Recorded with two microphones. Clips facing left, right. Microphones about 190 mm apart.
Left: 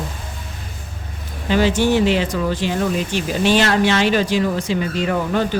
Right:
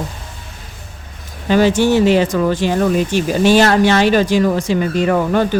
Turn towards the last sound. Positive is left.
turn(degrees=-50)  # may be behind; listen again after turning